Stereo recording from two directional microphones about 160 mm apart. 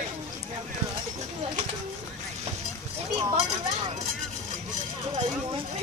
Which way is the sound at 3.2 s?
35° right (ahead or behind).